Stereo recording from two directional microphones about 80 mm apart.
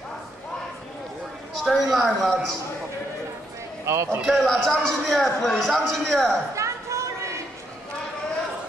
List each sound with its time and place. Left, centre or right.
1.6 s a man's voice: centre
3.8 s speech: right
4.3 s a man's voice: centre
6.5 s chatter: right